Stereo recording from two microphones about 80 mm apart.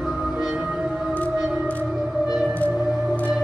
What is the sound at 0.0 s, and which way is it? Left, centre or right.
Music, centre.